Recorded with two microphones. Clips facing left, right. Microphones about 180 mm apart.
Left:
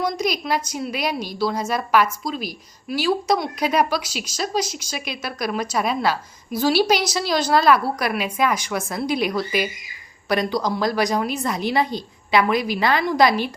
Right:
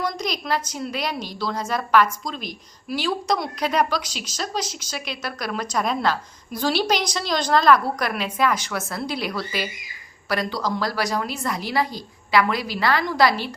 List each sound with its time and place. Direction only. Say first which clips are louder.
0.0 s a woman's voice: left 4 dB; 10° left (ahead or behind)